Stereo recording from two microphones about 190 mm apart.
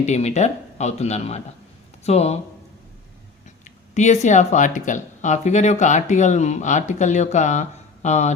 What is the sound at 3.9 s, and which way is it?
Speech, 40° left (ahead or behind).